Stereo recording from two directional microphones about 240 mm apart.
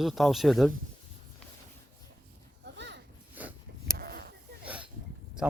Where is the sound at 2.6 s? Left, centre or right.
Right.